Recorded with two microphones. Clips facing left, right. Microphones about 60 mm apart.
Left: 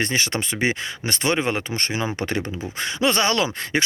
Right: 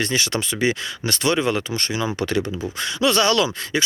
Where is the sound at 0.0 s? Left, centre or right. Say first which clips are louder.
Right 1 dB; left.